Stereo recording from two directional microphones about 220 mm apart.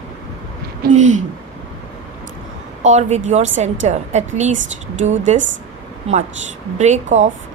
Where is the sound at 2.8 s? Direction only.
30° right (ahead or behind).